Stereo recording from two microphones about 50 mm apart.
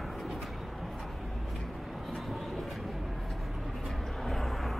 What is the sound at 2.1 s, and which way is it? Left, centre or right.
Vehicle, centre.